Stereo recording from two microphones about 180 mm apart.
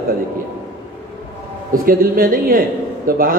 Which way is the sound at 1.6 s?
50° right (ahead or behind).